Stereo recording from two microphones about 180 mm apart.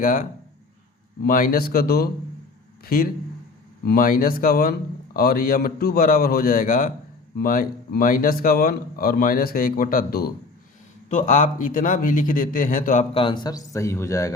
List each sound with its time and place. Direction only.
0.0 s speech: 50° left (ahead or behind)
11.1 s speech: 45° left (ahead or behind)
13.1 s a man's voice: 25° left (ahead or behind)